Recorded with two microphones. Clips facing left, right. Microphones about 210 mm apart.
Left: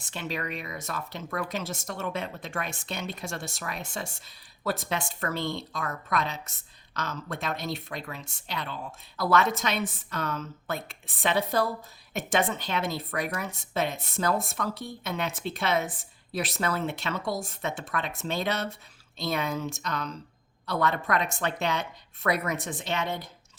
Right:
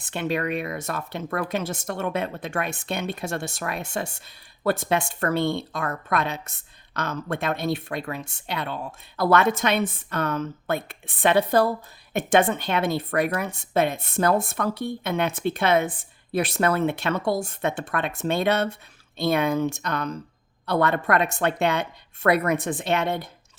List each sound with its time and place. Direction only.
0.0 s speech: 60° right (ahead or behind)